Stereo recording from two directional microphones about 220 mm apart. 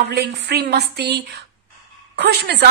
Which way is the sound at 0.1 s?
45° right (ahead or behind).